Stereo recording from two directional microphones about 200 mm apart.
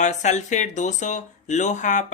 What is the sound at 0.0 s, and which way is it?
Speech, 35° left (ahead or behind).